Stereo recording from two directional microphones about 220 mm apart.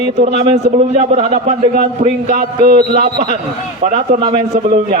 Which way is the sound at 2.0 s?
40° right (ahead or behind).